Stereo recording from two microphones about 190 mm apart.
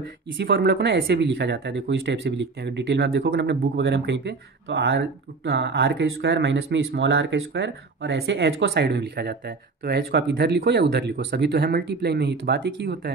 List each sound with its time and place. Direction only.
0.4 s speech: 60° right (ahead or behind)